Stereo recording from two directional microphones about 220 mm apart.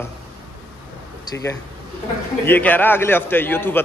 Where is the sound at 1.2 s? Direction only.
15° left (ahead or behind).